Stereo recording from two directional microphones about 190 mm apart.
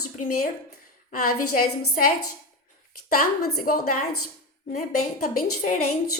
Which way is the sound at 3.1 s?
50° left (ahead or behind).